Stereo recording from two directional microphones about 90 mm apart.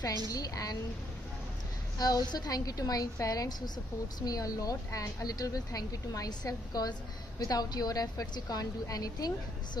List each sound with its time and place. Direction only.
0.3 s a woman's voice: 45° left (ahead or behind)
2.0 s a woman's voice: 45° left (ahead or behind)